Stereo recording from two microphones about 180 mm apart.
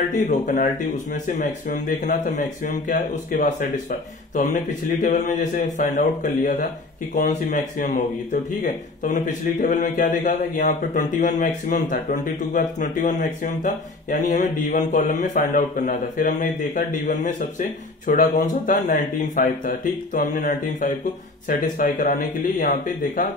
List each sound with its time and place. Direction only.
0.1 s speech: 45° left (ahead or behind)